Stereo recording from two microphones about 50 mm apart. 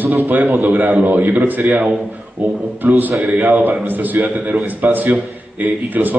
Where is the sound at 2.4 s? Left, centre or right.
Right.